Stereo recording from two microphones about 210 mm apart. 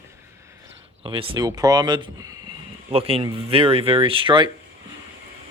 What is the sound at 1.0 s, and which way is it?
Speech, 25° right (ahead or behind).